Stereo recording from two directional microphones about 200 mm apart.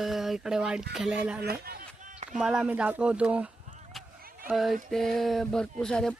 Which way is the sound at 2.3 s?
5° right (ahead or behind).